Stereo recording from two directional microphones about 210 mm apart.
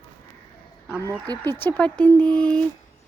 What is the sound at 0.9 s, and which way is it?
Speech, 10° right (ahead or behind).